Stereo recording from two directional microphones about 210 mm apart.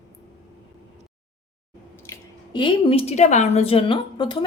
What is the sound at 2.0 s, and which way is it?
A woman's voice, 15° left (ahead or behind).